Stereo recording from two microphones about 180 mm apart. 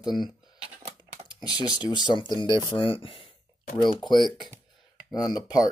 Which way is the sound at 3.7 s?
Centre (ahead or behind).